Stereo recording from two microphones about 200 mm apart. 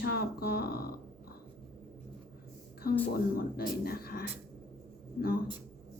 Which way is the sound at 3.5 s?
50° left (ahead or behind).